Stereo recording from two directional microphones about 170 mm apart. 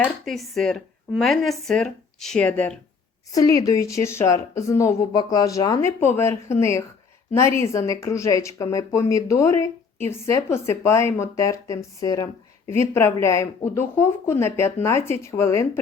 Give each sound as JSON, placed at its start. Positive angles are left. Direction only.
{"t": 0.0, "sound": "speech", "side_deg": 0}
{"t": 3.3, "sound": "a woman's voice", "side_deg": 20}